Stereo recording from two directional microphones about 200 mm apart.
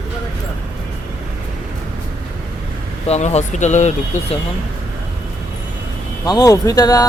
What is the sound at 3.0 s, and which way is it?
Speech, 30° left (ahead or behind).